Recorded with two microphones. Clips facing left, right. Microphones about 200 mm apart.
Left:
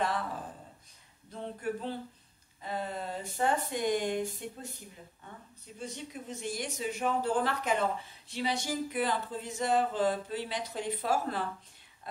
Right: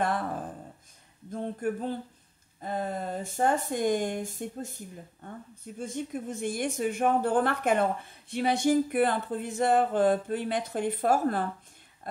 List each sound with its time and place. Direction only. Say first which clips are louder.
1.3 s speech: right 5 dB; 50° right (ahead or behind)